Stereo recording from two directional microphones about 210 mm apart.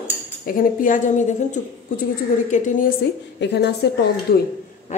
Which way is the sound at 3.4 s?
50° left (ahead or behind).